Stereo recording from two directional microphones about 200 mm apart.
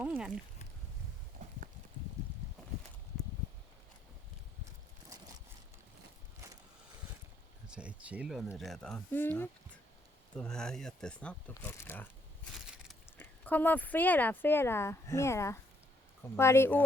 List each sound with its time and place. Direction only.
0.0 s speech: 5° right (ahead or behind)
1.4 s clip-clop: 50° right (ahead or behind)
7.7 s a sound: 5° right (ahead or behind)
8.5 s speech: centre (ahead or behind)
13.1 s speech: 10° left (ahead or behind)